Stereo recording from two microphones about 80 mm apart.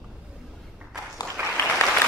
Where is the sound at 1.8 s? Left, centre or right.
Left.